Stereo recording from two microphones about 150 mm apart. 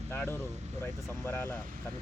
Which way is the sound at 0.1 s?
15° left (ahead or behind).